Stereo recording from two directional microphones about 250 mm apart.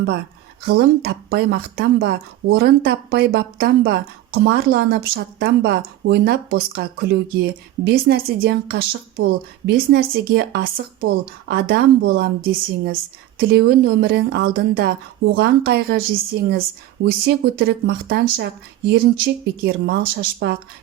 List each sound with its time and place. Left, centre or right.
0.6 s speech: right